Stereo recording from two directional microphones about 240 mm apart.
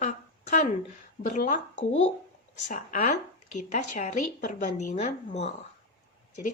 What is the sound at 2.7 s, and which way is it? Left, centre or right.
A woman's voice, left.